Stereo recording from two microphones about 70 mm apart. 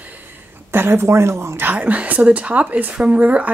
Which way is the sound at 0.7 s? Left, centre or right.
Right.